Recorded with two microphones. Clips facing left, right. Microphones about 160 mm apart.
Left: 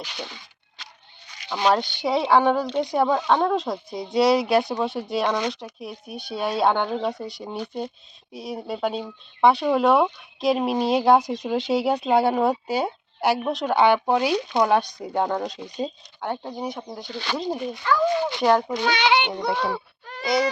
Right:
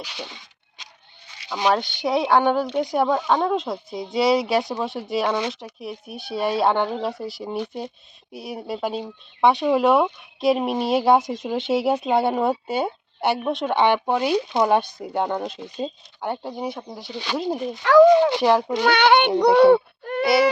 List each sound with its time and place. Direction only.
0.0 s speech: 10° right (ahead or behind)
1.5 s speech: 10° right (ahead or behind)
1.7 s speech: centre (ahead or behind)
17.8 s speech: 85° right
18.9 s a child's voice: 60° right (ahead or behind)
19.4 s speech: 70° right (ahead or behind)